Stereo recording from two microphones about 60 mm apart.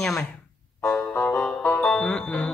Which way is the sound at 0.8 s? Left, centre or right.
Left.